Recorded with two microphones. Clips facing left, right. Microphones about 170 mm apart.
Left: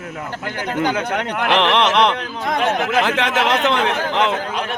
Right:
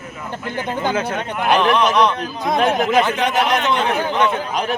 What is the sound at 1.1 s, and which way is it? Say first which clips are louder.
Speech: even; 75° left (ahead or behind).